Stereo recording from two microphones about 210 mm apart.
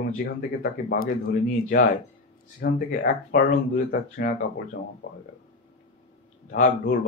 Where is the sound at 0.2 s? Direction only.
45° left (ahead or behind).